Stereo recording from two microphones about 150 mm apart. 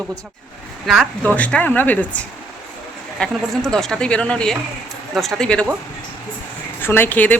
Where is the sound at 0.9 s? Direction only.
5° left (ahead or behind).